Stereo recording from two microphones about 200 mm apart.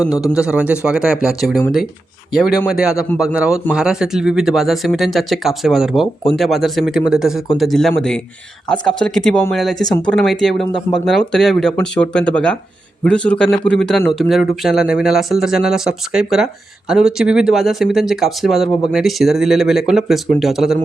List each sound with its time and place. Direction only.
0.3 s speech: 5° right (ahead or behind)
2.6 s speech: 5° right (ahead or behind)